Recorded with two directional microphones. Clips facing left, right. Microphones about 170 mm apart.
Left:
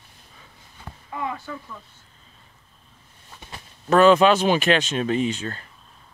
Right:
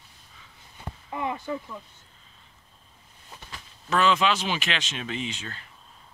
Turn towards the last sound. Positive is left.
turn(degrees=45)  # may be behind; listen again after turning